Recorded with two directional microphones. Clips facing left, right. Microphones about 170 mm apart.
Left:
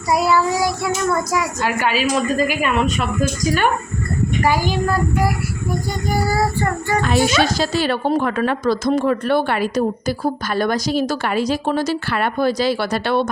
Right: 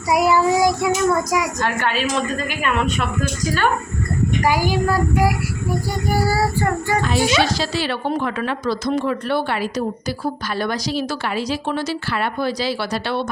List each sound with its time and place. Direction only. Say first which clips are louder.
0.1 s child singing: right 1 dB; 15° right (ahead or behind)
1.6 s a woman's voice: left 2 dB; 10° left (ahead or behind)
4.4 s child singing: even; 10° right (ahead or behind)
7.0 s a woman's voice: left 3 dB; 50° left (ahead or behind)